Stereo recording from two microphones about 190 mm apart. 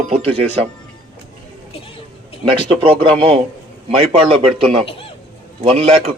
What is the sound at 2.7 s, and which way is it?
A man's voice, 30° right (ahead or behind).